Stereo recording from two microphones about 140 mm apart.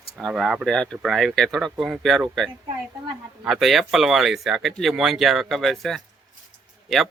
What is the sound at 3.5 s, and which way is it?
Speech, centre (ahead or behind).